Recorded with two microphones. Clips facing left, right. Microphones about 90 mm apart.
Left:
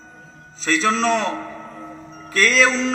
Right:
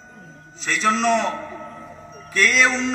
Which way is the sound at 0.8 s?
35° left (ahead or behind).